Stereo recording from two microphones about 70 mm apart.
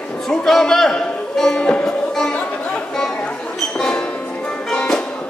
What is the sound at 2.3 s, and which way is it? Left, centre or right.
Chatter, left.